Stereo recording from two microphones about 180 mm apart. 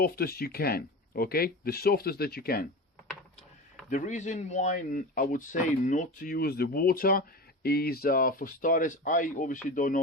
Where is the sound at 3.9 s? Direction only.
45° left (ahead or behind).